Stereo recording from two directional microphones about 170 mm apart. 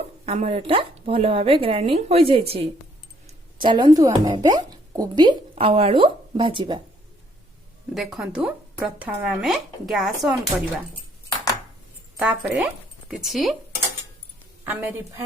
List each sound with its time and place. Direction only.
0.3 s speech: 35° right (ahead or behind)
7.9 s speech: 5° right (ahead or behind)
12.2 s speech: 10° right (ahead or behind)
14.6 s a woman's voice: 10° right (ahead or behind)